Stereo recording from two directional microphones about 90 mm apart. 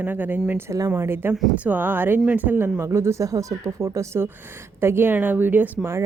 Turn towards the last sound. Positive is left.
turn(degrees=-25)  # may be behind; listen again after turning